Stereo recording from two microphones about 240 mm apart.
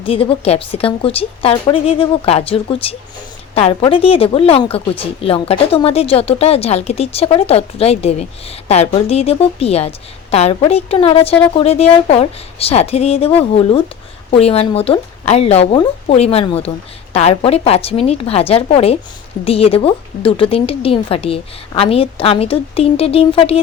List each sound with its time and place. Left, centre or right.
0.0 s speech: left